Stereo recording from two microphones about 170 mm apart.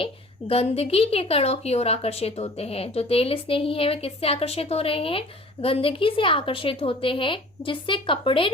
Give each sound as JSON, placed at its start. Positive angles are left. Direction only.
{"t": 0.0, "sound": "a woman's voice", "side_deg": 35}